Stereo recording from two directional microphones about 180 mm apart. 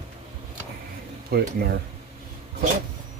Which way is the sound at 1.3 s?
60° right (ahead or behind).